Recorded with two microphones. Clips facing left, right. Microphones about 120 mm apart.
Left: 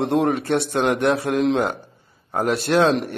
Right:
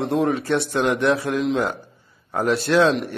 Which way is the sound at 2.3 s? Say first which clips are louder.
Even; 30° left (ahead or behind).